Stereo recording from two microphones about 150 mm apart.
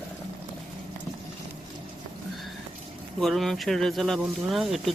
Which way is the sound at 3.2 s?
Centre (ahead or behind).